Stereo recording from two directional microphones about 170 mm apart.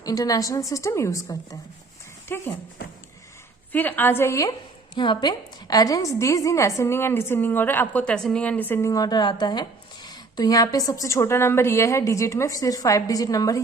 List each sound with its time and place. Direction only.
0.0 s a woman's voice: 20° left (ahead or behind)
3.7 s a woman's voice: 10° left (ahead or behind)